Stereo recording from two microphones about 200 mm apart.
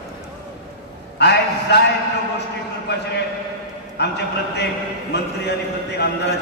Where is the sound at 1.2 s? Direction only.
55° left (ahead or behind).